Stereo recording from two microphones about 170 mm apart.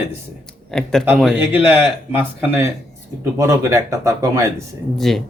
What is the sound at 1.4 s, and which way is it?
Speech, 10° right (ahead or behind).